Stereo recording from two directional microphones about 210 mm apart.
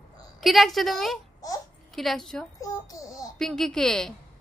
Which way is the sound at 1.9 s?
Centre (ahead or behind).